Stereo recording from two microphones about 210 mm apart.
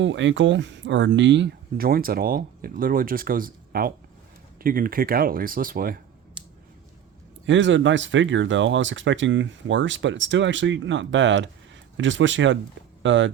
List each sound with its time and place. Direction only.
0.0 s speech: 65° right (ahead or behind); by 6.0 s 45° right (ahead or behind)
7.4 s speech: 60° right (ahead or behind)